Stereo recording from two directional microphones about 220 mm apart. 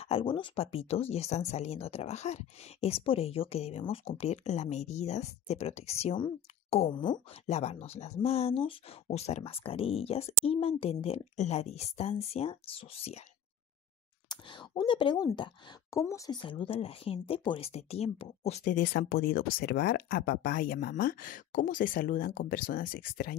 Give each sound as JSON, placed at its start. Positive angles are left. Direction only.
{"t": 0.0, "sound": "speech", "side_deg": 25}
{"t": 14.3, "sound": "speech", "side_deg": 20}